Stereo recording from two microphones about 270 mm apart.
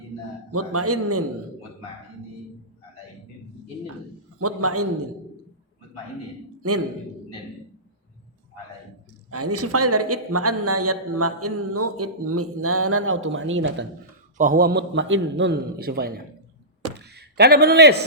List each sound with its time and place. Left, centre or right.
0.5 s speech: right
4.4 s speech: right
6.6 s a man's voice: right
9.3 s speech: right
14.3 s a man's voice: right